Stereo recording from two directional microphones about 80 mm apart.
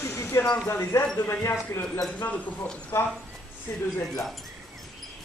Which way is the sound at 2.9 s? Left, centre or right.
Left.